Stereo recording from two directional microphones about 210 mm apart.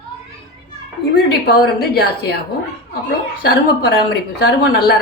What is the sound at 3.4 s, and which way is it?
A woman's voice, 50° left (ahead or behind).